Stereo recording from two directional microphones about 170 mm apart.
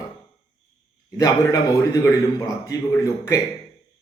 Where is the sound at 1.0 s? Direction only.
20° left (ahead or behind).